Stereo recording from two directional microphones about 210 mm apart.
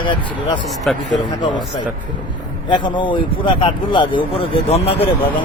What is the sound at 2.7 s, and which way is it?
Speech, 20° left (ahead or behind).